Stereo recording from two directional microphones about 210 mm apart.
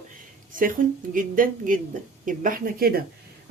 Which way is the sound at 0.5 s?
40° right (ahead or behind).